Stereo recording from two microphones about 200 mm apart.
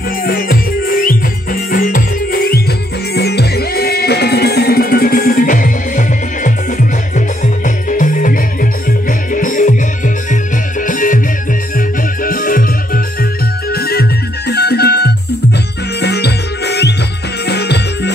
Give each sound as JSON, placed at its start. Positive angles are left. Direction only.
{"t": 0.2, "sound": "music", "side_deg": 45}
{"t": 12.2, "sound": "music", "side_deg": 45}